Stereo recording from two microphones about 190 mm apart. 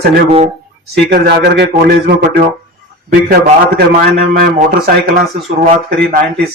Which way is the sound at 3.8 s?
55° right (ahead or behind).